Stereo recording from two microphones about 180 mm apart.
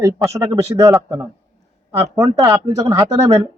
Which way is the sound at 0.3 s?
15° right (ahead or behind).